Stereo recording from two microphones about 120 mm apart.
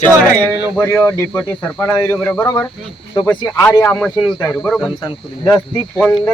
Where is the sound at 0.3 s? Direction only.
15° left (ahead or behind).